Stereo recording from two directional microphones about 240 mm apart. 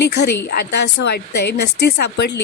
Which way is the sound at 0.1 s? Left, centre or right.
Left.